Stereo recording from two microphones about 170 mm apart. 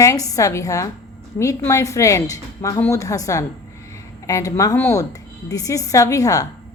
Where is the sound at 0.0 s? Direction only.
20° left (ahead or behind).